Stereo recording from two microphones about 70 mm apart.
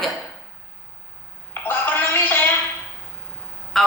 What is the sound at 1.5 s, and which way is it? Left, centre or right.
Speech, left.